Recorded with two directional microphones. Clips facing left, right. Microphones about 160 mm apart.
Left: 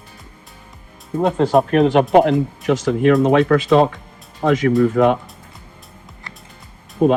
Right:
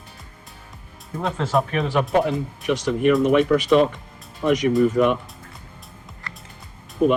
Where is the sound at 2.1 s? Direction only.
85° left.